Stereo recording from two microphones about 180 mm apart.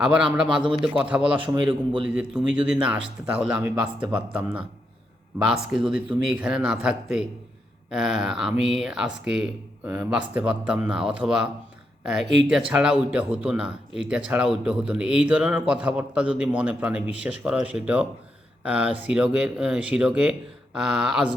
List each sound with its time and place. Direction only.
0.0 s speech: 5° right (ahead or behind)
1.4 s a man's voice: 30° right (ahead or behind)
2.0 s speech: 5° right (ahead or behind)
12.5 s speech: 5° right (ahead or behind)